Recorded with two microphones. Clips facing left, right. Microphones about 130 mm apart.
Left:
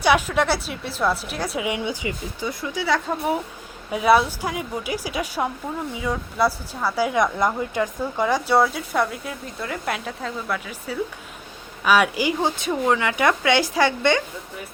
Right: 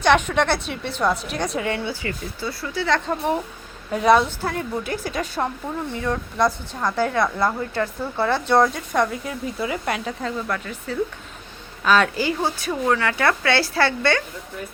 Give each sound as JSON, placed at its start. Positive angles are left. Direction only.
{"t": 0.0, "sound": "a woman's voice", "side_deg": 5}